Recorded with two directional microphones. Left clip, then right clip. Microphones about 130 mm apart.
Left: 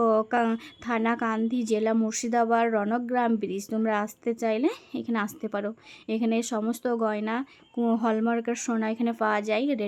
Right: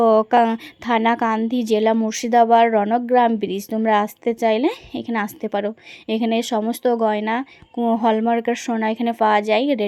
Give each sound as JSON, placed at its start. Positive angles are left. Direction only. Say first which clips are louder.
{"t": 0.0, "sound": "a woman's voice", "louder": "right 9 dB", "side_deg": -20}